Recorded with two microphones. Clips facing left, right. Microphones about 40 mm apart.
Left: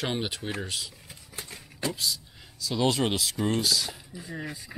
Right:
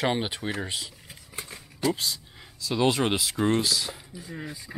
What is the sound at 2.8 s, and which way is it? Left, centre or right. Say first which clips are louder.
Speech: right 2 dB; centre.